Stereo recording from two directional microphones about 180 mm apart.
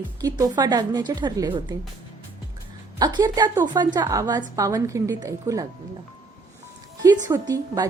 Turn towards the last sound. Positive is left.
turn(degrees=-20)  # may be behind; listen again after turning